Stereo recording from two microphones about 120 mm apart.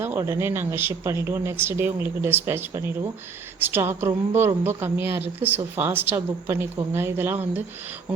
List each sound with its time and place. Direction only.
0.0 s a woman's voice: 20° right (ahead or behind)